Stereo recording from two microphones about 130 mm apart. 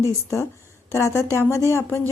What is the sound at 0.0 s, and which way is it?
A woman's voice, 20° left (ahead or behind).